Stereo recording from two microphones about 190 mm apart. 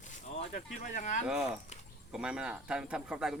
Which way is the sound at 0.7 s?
40° left (ahead or behind).